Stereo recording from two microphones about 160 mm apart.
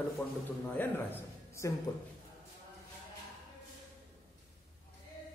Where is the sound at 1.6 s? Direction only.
20° left (ahead or behind).